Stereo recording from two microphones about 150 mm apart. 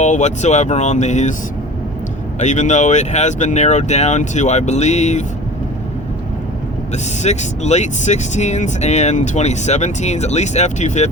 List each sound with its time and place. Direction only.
0.0 s speech: 50° left (ahead or behind)
2.4 s speech: 55° left (ahead or behind)
6.9 s speech: 50° left (ahead or behind)